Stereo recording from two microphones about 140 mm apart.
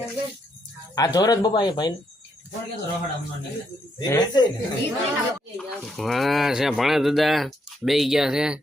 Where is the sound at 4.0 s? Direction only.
30° left (ahead or behind).